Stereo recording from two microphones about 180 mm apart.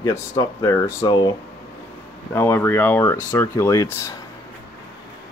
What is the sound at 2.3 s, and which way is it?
Speech, 15° left (ahead or behind).